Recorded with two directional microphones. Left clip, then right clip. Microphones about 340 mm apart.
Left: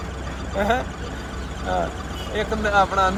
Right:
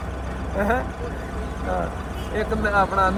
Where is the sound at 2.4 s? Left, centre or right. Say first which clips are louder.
Left 1 dB; centre.